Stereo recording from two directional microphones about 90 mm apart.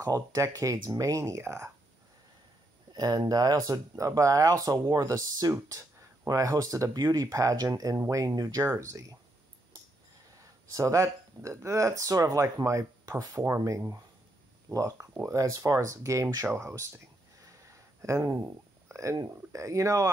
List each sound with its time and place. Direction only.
0.0 s speech: 35° right (ahead or behind)
2.9 s speech: 50° right (ahead or behind); by 9.0 s 35° right (ahead or behind)
10.7 s speech: 35° right (ahead or behind)
18.0 s speech: 35° right (ahead or behind)